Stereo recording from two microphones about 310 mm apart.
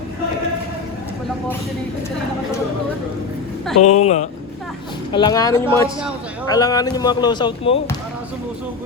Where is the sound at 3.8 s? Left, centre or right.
Left.